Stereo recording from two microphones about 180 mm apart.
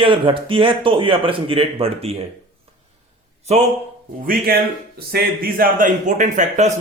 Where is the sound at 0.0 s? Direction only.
30° right (ahead or behind).